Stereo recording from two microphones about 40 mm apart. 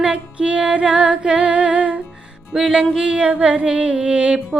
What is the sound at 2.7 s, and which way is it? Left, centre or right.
Music, centre.